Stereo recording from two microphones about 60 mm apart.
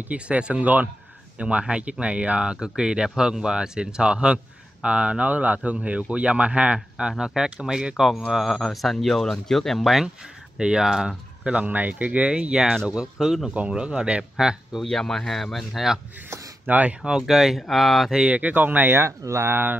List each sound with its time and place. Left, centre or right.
0.0 s speech: right
11.4 s speech: right
14.3 s speech: centre
14.9 s speech: centre
16.3 s a sound: right
16.6 s speech: right
17.0 s speech: centre
18.3 s speech: right
19.0 s speech: right